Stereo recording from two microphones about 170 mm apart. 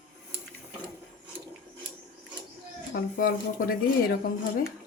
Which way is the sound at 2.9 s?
60° left (ahead or behind).